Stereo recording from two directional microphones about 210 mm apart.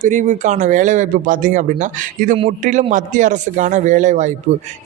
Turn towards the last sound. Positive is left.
turn(degrees=-35)  # may be behind; listen again after turning